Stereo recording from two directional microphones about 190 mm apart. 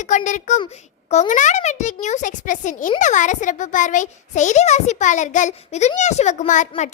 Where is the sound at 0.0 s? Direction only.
40° left (ahead or behind).